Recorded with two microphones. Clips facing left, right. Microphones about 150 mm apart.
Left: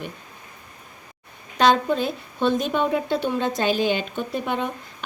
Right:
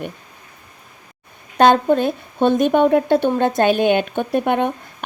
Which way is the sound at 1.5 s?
55° right (ahead or behind).